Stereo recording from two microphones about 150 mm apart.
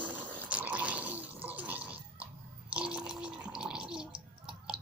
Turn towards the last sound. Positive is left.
turn(degrees=-5)  # may be behind; listen again after turning